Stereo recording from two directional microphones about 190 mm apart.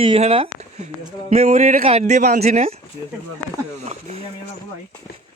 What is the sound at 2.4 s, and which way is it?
Speech, 35° right (ahead or behind).